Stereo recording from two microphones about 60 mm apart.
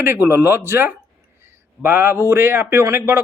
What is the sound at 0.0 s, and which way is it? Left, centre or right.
Speech, right.